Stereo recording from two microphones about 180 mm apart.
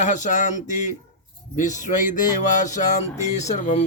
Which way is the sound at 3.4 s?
40° left (ahead or behind).